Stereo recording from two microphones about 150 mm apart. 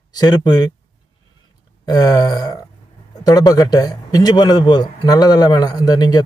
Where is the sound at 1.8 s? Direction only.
25° left (ahead or behind).